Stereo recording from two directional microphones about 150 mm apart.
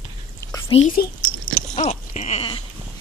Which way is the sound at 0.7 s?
40° left (ahead or behind).